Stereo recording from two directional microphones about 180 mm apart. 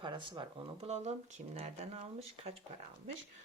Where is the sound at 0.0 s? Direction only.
25° right (ahead or behind).